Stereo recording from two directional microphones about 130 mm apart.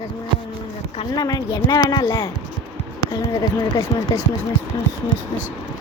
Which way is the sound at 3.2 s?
30° left (ahead or behind).